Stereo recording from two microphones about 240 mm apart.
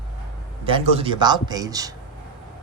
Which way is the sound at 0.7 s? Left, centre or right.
Right.